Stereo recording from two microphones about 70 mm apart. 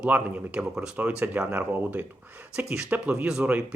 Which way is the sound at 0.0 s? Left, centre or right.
Centre.